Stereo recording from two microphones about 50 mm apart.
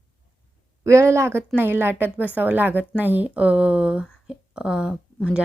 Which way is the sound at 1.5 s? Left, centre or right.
Right.